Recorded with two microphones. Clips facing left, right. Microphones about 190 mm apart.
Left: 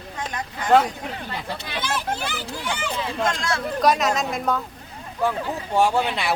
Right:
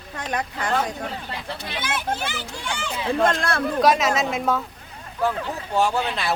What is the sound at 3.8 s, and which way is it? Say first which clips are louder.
Speech: right 1 dB; centre (ahead or behind).